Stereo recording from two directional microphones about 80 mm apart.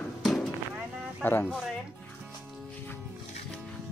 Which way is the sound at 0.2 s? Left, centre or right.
Centre.